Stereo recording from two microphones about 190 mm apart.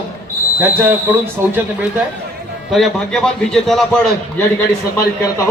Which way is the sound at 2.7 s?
Centre (ahead or behind).